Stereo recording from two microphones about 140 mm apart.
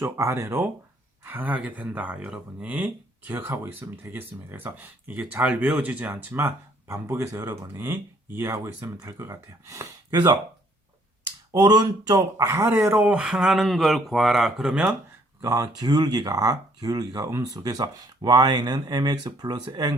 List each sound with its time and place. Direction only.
0.0 s speech: 20° right (ahead or behind)
11.5 s speech: 30° right (ahead or behind); by 14.9 s 5° right (ahead or behind)
15.4 s speech: 25° right (ahead or behind)